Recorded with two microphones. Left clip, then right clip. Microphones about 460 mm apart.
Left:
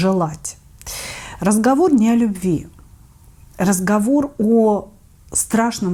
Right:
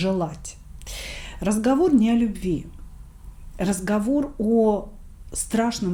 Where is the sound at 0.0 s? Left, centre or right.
Left.